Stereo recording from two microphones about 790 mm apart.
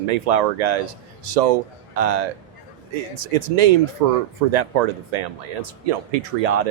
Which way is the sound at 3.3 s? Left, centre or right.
Right.